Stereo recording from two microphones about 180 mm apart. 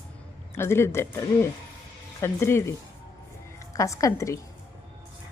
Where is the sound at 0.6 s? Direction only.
15° left (ahead or behind).